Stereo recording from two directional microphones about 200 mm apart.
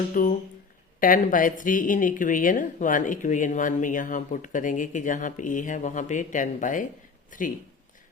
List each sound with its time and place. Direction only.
0.1 s speech: 40° left (ahead or behind)